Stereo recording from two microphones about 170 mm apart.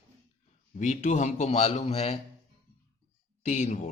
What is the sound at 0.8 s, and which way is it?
Speech, 45° left (ahead or behind).